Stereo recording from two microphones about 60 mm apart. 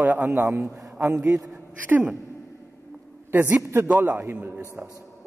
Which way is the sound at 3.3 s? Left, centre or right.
Right.